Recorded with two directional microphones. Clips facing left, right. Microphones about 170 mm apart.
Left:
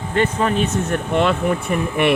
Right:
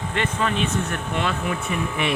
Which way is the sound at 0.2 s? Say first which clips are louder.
Left 6 dB; 40° left (ahead or behind).